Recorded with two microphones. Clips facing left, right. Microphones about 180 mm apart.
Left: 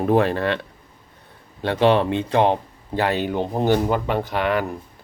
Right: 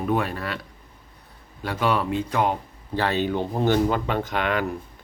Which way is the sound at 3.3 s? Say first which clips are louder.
Left 2 dB; 15° left (ahead or behind).